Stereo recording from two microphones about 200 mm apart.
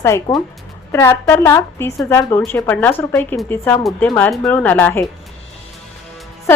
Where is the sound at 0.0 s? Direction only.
15° left (ahead or behind).